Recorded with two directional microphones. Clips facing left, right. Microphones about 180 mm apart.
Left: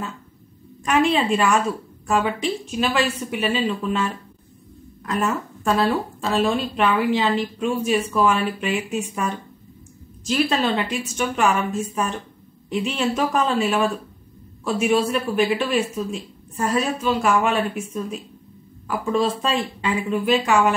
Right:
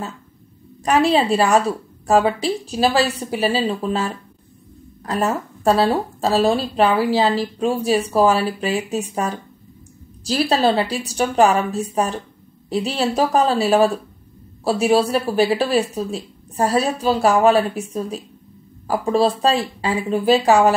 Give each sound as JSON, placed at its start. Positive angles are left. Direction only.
{"t": 0.8, "sound": "speech", "side_deg": -35}